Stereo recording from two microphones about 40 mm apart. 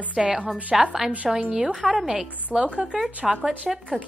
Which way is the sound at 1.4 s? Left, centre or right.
Right.